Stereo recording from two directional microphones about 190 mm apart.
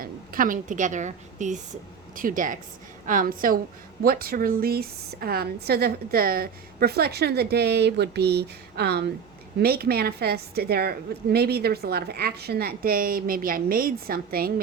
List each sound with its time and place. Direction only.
0.0 s a woman's voice: 45° right (ahead or behind)